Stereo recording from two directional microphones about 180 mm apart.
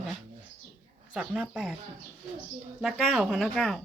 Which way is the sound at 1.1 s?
5° right (ahead or behind).